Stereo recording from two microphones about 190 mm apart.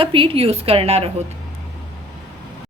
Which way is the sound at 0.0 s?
25° right (ahead or behind).